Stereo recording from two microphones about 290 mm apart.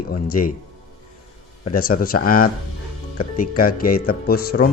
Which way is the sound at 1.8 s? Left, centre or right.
Left.